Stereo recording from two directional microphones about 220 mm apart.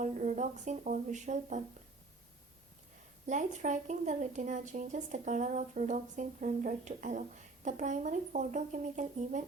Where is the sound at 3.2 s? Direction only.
35° right (ahead or behind).